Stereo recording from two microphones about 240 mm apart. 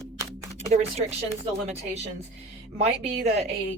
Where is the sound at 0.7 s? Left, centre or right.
Right.